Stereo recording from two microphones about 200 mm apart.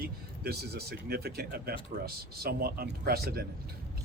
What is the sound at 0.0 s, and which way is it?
Speech, 50° right (ahead or behind).